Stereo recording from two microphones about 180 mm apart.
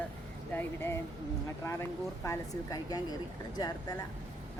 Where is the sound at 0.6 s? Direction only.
15° left (ahead or behind).